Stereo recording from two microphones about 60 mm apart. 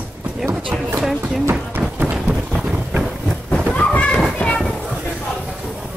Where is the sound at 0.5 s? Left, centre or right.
Right.